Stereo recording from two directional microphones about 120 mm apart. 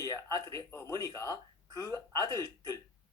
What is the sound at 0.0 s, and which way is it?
Speech, 30° left (ahead or behind).